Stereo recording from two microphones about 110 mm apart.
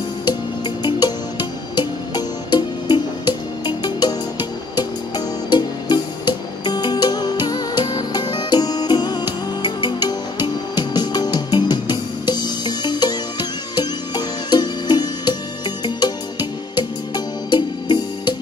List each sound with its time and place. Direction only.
0.3 s music: 40° left (ahead or behind)